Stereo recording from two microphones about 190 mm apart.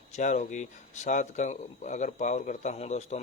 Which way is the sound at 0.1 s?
40° left (ahead or behind).